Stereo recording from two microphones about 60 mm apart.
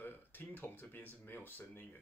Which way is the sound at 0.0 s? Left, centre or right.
Left.